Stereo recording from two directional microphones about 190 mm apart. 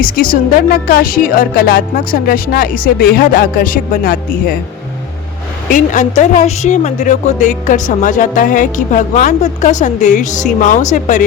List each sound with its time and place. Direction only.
0.0 s speech: 45° left (ahead or behind)
5.7 s a woman's voice: 40° left (ahead or behind)